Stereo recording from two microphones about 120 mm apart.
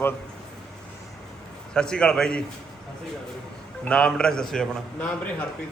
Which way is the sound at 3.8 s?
5° left (ahead or behind).